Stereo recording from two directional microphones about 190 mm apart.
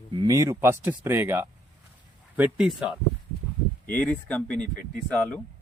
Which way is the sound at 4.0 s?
5° left (ahead or behind).